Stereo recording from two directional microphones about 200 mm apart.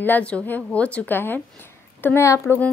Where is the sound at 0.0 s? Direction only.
5° left (ahead or behind).